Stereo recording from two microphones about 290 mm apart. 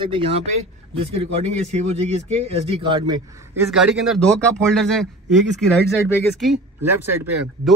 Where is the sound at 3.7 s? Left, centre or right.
Centre.